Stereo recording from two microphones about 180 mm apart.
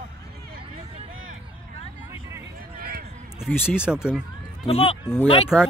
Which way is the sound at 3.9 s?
5° right (ahead or behind).